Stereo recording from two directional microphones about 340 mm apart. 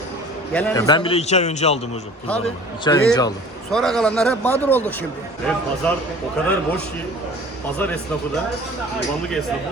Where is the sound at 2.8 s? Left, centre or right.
Centre.